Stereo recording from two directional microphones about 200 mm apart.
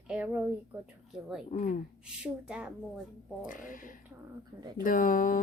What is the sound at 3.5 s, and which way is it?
Speech, 40° left (ahead or behind).